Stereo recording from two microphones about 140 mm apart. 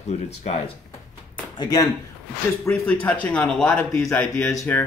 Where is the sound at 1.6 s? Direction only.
25° left (ahead or behind).